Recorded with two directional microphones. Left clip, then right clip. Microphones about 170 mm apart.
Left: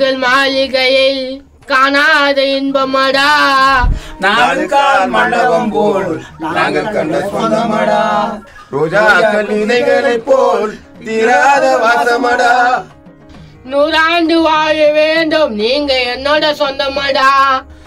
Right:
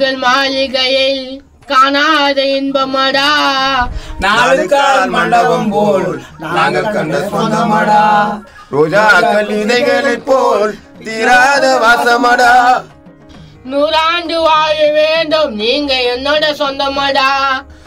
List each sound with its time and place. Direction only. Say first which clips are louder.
0.0 s a sound: left 1 dB; 40° left (ahead or behind)
4.4 s a man's voice: right 2 dB; 45° right (ahead or behind)
8.7 s a man's voice: right 1 dB; 55° right (ahead or behind)
13.7 s speech: left 1 dB; 20° left (ahead or behind)